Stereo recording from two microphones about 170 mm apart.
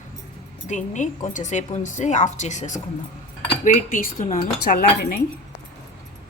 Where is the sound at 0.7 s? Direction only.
45° left (ahead or behind).